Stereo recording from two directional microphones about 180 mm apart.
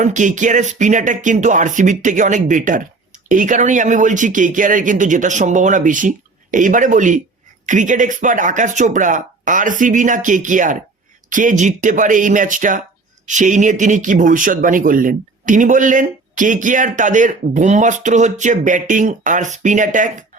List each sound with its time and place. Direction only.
0.0 s speech: 45° right (ahead or behind)